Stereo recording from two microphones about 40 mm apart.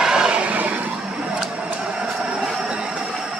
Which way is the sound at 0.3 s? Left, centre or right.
Right.